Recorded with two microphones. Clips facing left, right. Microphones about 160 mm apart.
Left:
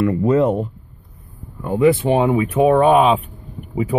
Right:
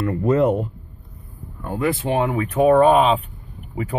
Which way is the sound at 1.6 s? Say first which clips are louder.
Left 8 dB; 15° left (ahead or behind).